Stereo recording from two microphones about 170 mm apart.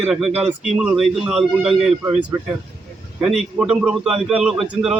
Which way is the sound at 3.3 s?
5° right (ahead or behind).